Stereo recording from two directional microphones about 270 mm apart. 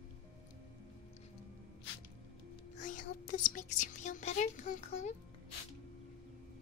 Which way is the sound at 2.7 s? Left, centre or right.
Left.